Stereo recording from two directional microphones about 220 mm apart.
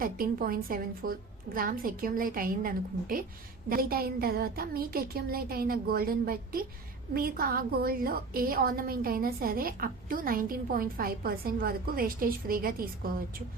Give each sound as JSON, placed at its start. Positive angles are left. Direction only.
{"t": 0.0, "sound": "a woman's voice", "side_deg": -40}